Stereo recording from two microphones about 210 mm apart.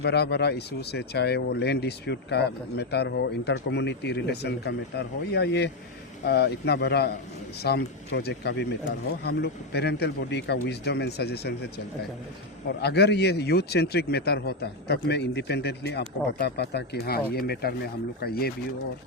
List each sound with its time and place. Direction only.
0.0 s speech: 50° left (ahead or behind)
12.8 s speech: 50° left (ahead or behind)